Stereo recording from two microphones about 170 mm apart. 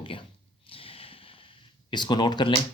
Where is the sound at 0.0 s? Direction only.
30° left (ahead or behind).